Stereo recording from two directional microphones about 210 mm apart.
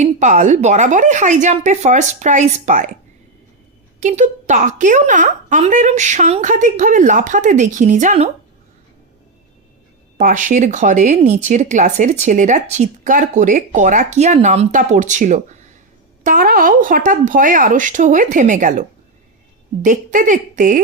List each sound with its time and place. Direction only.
0.0 s speech: 35° right (ahead or behind)
4.0 s speech: 35° right (ahead or behind)
10.2 s speech: 35° right (ahead or behind)